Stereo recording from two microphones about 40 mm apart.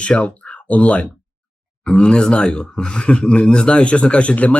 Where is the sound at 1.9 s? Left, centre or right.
Left.